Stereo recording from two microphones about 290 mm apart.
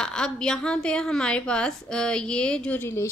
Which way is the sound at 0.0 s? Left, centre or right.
Centre.